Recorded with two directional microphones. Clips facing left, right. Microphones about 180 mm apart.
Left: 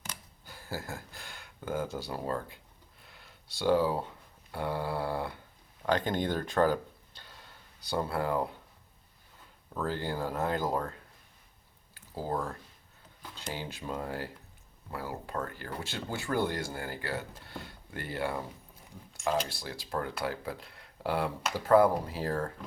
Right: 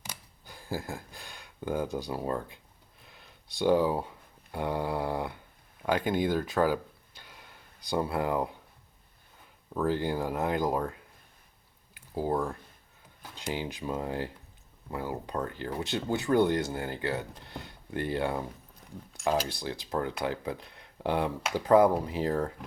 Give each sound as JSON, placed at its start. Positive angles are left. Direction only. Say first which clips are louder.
{"t": 0.0, "sound": "speech", "louder": "even", "side_deg": -15}
{"t": 3.1, "sound": "a sound", "louder": "right 2 dB", "side_deg": -20}
{"t": 4.5, "sound": "speech", "louder": "right 2 dB", "side_deg": -15}
{"t": 9.7, "sound": "speech", "louder": "right 5 dB", "side_deg": -15}
{"t": 11.9, "sound": "speech", "louder": "right 4 dB", "side_deg": -15}